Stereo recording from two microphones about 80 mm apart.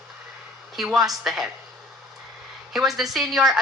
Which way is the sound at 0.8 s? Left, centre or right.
Centre.